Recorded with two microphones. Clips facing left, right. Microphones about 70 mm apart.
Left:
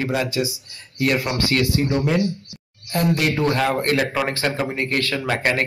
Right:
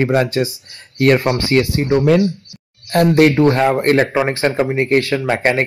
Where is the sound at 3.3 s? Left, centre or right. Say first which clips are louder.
Right 7 dB; right.